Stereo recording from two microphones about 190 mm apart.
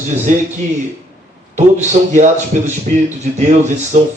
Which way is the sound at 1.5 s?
40° right (ahead or behind).